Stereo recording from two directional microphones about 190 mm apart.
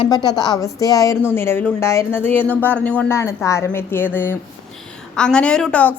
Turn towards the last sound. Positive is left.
turn(degrees=5)  # may be behind; listen again after turning